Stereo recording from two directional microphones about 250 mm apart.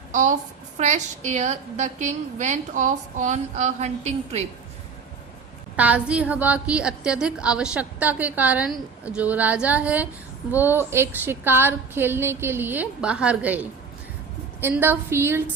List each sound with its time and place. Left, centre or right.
0.1 s a woman's voice: right
5.7 s a woman's voice: centre